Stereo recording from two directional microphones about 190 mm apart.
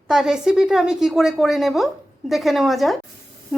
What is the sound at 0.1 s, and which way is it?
A woman's voice, centre (ahead or behind).